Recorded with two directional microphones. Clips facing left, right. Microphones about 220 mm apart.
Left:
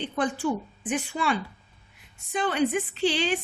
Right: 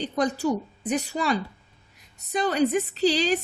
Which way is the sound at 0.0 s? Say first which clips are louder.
Right 2 dB; 40° right (ahead or behind).